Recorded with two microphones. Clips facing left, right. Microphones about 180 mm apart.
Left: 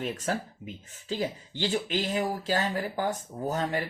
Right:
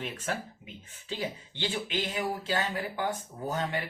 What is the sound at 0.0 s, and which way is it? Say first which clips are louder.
Speech: left 4 dB; 40° left (ahead or behind).